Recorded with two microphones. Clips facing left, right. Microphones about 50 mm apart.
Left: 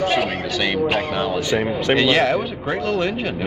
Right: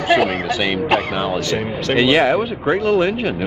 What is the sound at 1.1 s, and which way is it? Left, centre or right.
A man's voice, centre.